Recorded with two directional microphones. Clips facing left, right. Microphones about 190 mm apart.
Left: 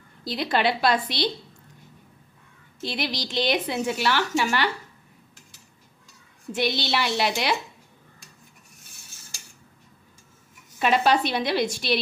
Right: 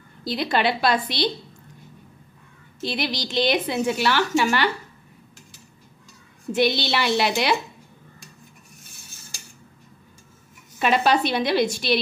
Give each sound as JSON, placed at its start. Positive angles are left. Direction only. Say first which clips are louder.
{"t": 0.2, "sound": "a woman's voice", "louder": "right 1 dB", "side_deg": -65}
{"t": 2.8, "sound": "a woman's voice", "louder": "right 2 dB", "side_deg": -70}
{"t": 6.5, "sound": "a woman's voice", "louder": "right 4 dB", "side_deg": -70}
{"t": 10.8, "sound": "a woman's voice", "louder": "right 1 dB", "side_deg": -70}